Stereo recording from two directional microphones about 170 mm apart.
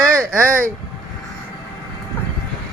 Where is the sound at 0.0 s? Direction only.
15° right (ahead or behind).